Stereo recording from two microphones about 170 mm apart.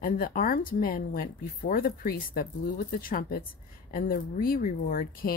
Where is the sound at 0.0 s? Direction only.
60° left (ahead or behind).